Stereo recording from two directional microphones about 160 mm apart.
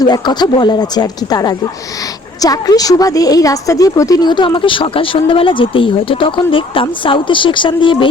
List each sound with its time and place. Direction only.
0.0 s a woman's voice: 25° left (ahead or behind)